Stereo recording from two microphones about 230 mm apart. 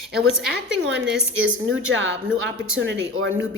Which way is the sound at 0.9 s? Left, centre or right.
Right.